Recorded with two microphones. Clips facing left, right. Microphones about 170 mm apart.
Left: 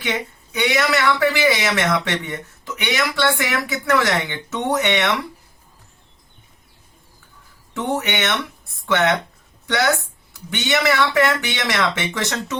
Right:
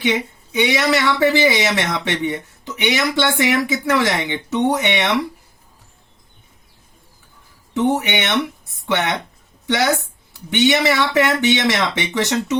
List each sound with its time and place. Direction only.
0.5 s speech: 20° right (ahead or behind)
7.8 s a woman's voice: 20° right (ahead or behind)